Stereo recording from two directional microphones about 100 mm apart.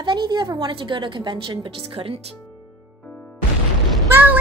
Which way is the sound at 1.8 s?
60° right (ahead or behind).